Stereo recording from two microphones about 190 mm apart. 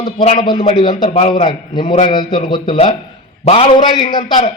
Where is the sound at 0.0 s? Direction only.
25° left (ahead or behind).